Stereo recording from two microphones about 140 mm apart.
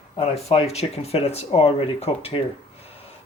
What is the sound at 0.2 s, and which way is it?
Speech, 45° left (ahead or behind).